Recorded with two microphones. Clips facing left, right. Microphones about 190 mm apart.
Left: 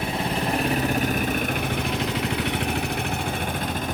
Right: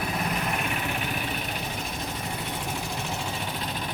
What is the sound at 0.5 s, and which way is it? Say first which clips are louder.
Vehicle: left 7 dB; 35° left (ahead or behind).